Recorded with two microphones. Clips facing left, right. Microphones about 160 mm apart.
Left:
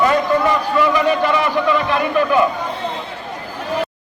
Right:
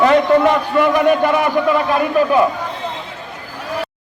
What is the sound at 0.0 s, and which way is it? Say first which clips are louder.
A man's voice: right 4 dB; 65° right (ahead or behind).